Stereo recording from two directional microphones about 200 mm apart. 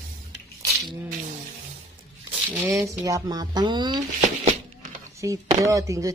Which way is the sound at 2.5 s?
10° right (ahead or behind).